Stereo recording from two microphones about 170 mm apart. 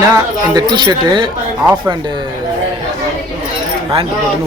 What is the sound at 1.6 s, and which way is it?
Speech, 15° right (ahead or behind).